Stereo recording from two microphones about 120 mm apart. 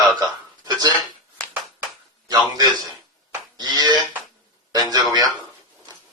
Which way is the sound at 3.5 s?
35° right (ahead or behind).